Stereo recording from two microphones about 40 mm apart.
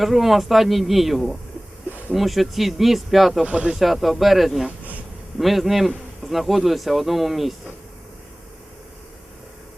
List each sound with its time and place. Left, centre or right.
0.0 s speech: centre
3.4 s speech: right
3.8 s speech: centre